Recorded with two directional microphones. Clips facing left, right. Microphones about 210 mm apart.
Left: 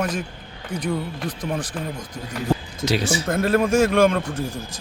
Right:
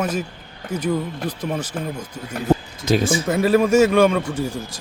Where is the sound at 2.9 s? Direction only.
50° right (ahead or behind).